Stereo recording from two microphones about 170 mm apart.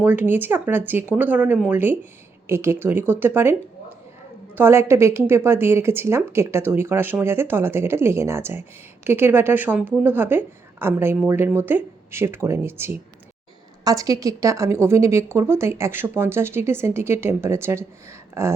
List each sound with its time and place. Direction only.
0.0 s a woman's voice: 10° right (ahead or behind)